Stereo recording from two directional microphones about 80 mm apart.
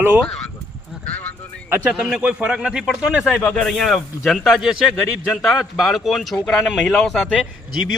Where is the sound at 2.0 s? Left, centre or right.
Centre.